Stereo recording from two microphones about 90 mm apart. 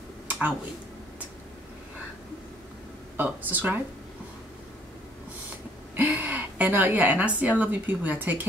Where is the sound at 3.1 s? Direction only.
20° right (ahead or behind).